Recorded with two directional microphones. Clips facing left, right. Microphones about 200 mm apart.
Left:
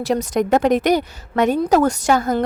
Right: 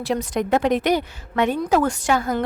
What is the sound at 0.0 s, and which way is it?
A woman's voice, 40° left (ahead or behind).